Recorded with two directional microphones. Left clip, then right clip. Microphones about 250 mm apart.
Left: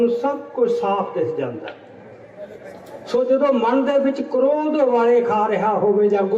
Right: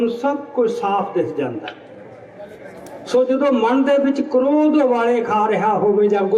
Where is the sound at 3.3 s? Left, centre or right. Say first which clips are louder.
Even; right.